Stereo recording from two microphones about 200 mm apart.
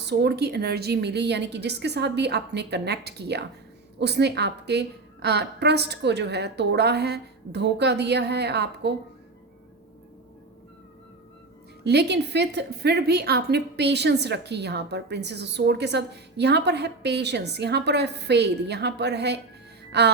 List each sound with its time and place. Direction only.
0.0 s a woman's voice: 55° right (ahead or behind)
11.8 s a woman's voice: 55° right (ahead or behind)
19.9 s music: 55° right (ahead or behind)